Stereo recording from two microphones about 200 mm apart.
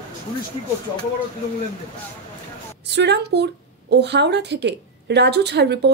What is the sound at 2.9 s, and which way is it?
A woman's voice, 55° right (ahead or behind).